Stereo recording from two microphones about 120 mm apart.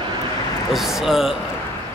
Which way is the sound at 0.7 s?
5° right (ahead or behind).